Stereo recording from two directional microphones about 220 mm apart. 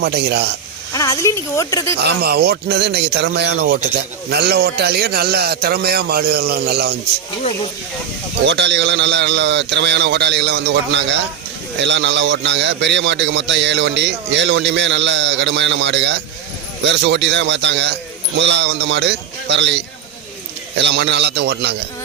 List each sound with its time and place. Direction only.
0.0 s a man's voice: 50° right (ahead or behind)
0.9 s speech: 15° left (ahead or behind)
2.0 s a man's voice: 45° right (ahead or behind)
8.4 s a man's voice: 50° right (ahead or behind)